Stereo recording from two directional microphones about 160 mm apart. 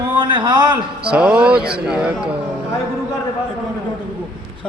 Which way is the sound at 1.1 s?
5° right (ahead or behind).